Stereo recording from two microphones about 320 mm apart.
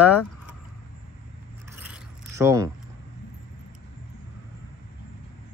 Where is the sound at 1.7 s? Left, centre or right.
Centre.